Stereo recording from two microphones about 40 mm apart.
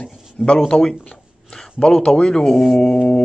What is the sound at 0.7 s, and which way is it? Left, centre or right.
Speech, left.